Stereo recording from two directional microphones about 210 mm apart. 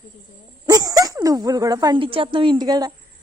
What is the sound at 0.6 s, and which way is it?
Speech, 15° right (ahead or behind).